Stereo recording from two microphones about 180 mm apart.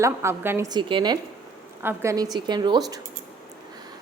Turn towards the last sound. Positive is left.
turn(degrees=-20)  # may be behind; listen again after turning